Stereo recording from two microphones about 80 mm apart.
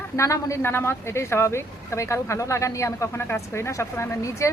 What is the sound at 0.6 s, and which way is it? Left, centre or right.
Speech, left.